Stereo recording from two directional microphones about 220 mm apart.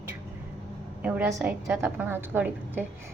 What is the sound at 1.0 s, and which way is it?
A woman's voice, 5° right (ahead or behind).